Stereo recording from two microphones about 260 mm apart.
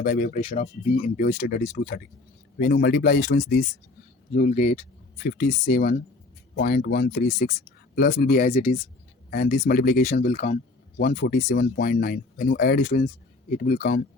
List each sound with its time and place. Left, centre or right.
0.0 s speech: left
4.4 s speech: left
5.1 s speech: left